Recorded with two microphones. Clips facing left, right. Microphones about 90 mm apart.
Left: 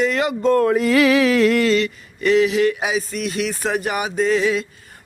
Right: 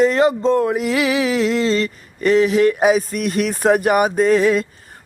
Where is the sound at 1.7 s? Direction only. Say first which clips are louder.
Left 1 dB; 40° right (ahead or behind).